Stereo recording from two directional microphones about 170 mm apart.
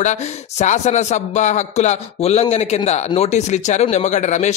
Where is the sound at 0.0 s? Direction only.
45° left (ahead or behind).